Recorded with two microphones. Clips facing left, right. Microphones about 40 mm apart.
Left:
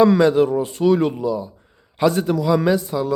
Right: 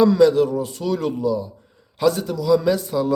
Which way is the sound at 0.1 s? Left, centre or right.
Left.